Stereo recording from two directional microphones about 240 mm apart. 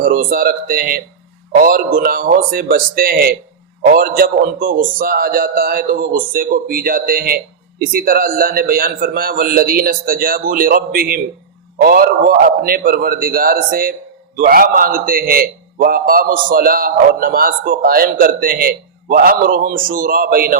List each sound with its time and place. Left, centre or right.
0.0 s a man's voice: right